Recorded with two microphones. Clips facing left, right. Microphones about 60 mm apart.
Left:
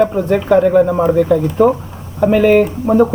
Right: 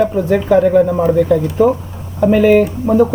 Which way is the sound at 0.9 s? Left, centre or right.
Left.